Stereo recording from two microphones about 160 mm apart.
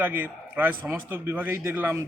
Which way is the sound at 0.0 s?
10° right (ahead or behind).